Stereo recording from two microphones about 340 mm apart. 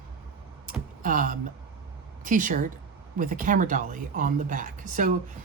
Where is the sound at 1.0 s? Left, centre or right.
Right.